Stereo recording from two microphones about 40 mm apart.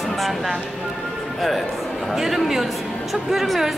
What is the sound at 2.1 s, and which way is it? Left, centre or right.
A woman's voice, centre.